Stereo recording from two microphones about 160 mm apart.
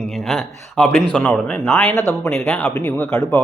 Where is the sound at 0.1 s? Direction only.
Centre (ahead or behind).